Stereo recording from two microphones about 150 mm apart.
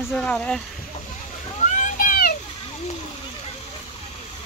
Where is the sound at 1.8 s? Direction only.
65° left (ahead or behind).